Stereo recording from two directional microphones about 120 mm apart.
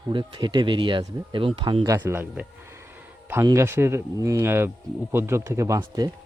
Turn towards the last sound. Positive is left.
turn(degrees=-30)  # may be behind; listen again after turning